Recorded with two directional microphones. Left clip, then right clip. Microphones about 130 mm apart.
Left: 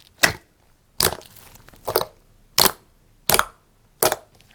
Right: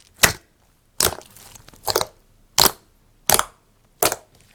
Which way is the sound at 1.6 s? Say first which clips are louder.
Right 1 dB; 5° right (ahead or behind).